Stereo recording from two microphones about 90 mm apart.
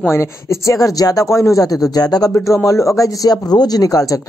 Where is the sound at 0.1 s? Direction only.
30° left (ahead or behind).